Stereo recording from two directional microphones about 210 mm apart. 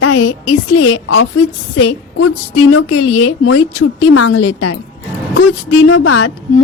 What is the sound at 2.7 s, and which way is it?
A woman's voice, 80° left.